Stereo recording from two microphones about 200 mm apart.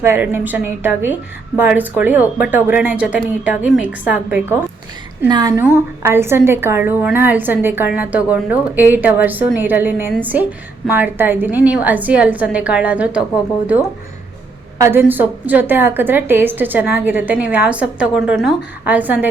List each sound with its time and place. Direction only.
0.0 s a woman's voice: 10° right (ahead or behind)
5.3 s a woman's voice: 20° right (ahead or behind)
14.8 s a woman's voice: 10° right (ahead or behind)